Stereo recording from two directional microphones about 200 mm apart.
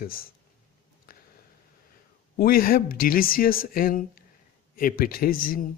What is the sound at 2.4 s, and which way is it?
Speech, 45° left (ahead or behind).